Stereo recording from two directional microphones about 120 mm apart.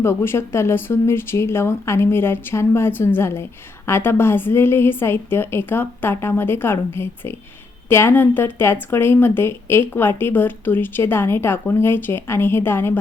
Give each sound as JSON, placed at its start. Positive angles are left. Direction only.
{"t": 0.0, "sound": "speech", "side_deg": 20}